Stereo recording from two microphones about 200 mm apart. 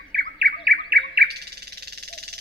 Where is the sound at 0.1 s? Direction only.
50° right (ahead or behind).